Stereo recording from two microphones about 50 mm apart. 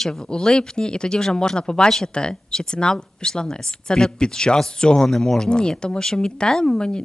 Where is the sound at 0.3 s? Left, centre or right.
Centre.